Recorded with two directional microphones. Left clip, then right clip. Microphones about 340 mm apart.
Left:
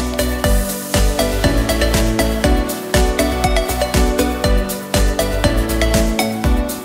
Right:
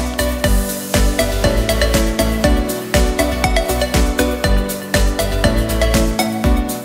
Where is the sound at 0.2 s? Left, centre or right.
Centre.